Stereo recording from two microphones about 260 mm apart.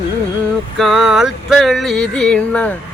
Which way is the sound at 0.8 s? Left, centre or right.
Centre.